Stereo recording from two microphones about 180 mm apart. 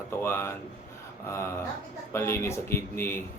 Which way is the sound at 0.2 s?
15° left (ahead or behind).